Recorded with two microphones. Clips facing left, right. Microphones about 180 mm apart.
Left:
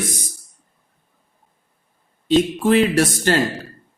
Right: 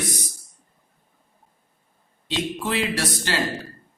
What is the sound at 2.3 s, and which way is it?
Speech, 45° left (ahead or behind).